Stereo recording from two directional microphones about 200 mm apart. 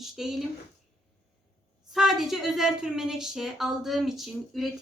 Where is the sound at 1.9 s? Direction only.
Centre (ahead or behind).